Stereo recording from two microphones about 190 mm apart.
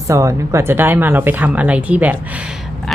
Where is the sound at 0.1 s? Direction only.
15° right (ahead or behind).